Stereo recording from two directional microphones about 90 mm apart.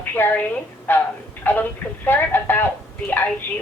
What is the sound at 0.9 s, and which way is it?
Speech, 20° left (ahead or behind).